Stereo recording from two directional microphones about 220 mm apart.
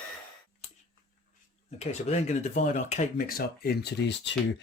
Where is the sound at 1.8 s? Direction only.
30° left (ahead or behind).